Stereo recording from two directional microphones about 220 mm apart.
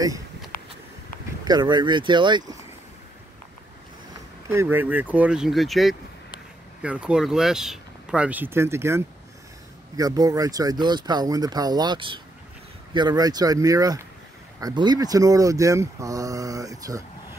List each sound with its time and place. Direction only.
1.4 s speech: 20° right (ahead or behind)
4.5 s speech: 10° right (ahead or behind)